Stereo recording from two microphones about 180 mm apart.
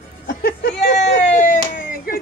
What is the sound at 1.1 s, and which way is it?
Speech, 45° left (ahead or behind).